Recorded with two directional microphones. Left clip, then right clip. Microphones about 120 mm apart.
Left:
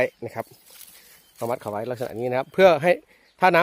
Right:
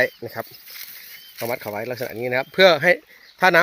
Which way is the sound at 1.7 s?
15° left (ahead or behind).